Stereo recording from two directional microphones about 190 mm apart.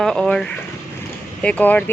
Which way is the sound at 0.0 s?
Centre (ahead or behind).